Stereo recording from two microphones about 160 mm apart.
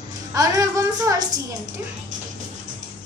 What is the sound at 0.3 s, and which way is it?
Music, 20° right (ahead or behind).